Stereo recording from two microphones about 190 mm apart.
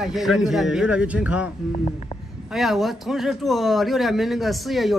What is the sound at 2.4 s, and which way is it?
A man's voice, centre (ahead or behind).